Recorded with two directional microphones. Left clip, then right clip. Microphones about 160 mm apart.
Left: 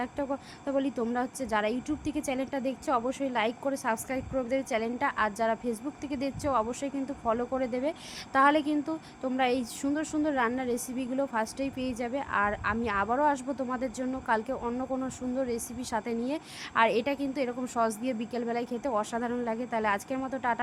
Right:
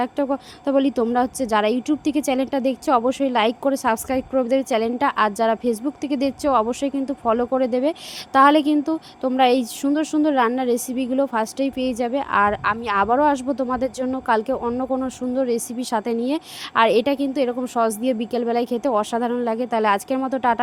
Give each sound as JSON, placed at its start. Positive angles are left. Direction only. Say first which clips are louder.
{"t": 0.0, "sound": "a woman's voice", "louder": "right 10 dB", "side_deg": -30}